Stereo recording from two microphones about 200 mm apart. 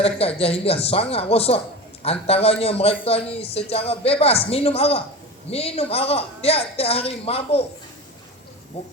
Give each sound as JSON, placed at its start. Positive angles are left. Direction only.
{"t": 0.0, "sound": "a man's voice", "side_deg": 30}